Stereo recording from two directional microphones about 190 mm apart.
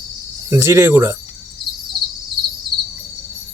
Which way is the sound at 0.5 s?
15° right (ahead or behind).